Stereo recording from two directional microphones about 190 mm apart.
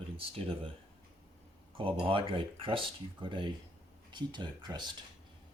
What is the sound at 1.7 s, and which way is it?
Speech, 30° right (ahead or behind).